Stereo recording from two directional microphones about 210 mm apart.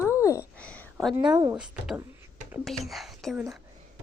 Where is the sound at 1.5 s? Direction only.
5° right (ahead or behind).